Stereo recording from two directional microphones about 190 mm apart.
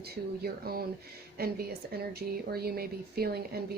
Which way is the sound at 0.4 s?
55° right (ahead or behind).